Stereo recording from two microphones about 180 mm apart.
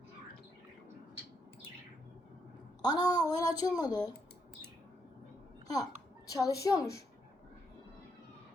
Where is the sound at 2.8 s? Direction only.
20° left (ahead or behind).